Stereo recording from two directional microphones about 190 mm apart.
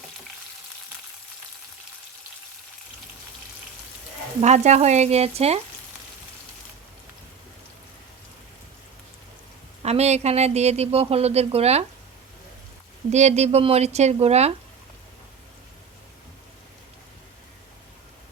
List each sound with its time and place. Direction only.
4.4 s speech: 35° right (ahead or behind)
9.8 s speech: 35° right (ahead or behind)
13.1 s speech: 35° right (ahead or behind)